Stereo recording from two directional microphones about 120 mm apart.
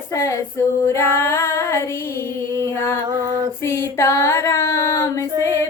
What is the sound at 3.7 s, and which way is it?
Female singing, 20° left (ahead or behind).